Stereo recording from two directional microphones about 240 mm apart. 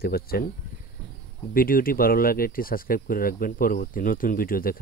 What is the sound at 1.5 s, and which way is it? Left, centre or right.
Speech, left.